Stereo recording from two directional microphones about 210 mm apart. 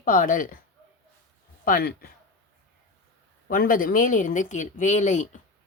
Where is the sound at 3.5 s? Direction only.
40° left (ahead or behind).